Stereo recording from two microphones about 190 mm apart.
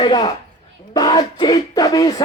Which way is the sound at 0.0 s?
20° left (ahead or behind).